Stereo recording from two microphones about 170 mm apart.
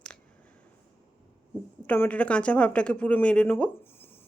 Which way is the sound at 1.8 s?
10° left (ahead or behind).